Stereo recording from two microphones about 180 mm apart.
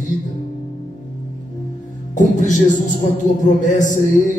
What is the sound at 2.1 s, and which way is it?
Speech, 45° left (ahead or behind).